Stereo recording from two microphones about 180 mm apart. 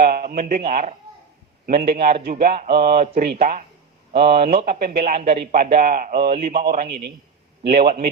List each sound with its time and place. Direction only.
0.0 s a man's voice: 55° right (ahead or behind)